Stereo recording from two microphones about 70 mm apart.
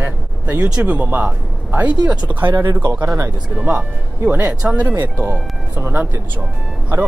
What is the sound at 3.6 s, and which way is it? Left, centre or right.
Speech, right.